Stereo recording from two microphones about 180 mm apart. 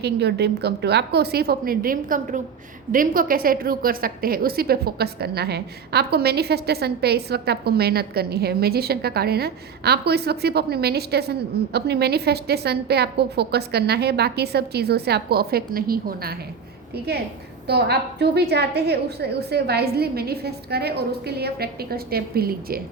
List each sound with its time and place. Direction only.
0.0 s a woman's voice: 70° right (ahead or behind)
17.7 s a woman's voice: 65° right (ahead or behind)